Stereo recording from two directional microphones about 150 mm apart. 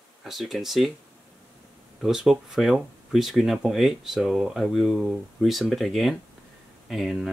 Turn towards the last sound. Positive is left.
turn(degrees=0)  # may be behind; listen again after turning